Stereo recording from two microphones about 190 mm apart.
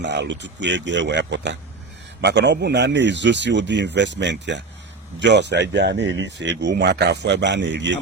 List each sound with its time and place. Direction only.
0.0 s speech: 65° right (ahead or behind)